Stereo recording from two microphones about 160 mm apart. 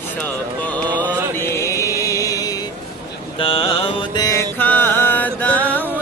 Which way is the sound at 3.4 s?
35° left (ahead or behind).